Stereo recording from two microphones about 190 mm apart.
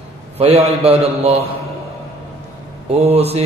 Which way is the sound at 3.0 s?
35° right (ahead or behind).